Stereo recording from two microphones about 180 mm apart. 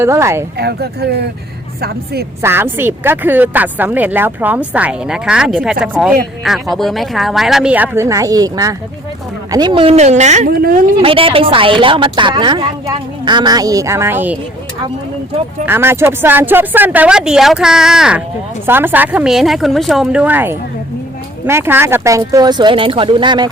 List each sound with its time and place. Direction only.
0.0 s speech: 15° right (ahead or behind)
0.5 s speech: 65° right (ahead or behind)
2.4 s speech: 15° right (ahead or behind); by 10.5 s 40° right (ahead or behind)
10.5 s speech: 55° right (ahead or behind)
11.0 s a woman's voice: 30° right (ahead or behind); by 14.3 s 10° right (ahead or behind)
15.6 s a woman's voice: 15° right (ahead or behind)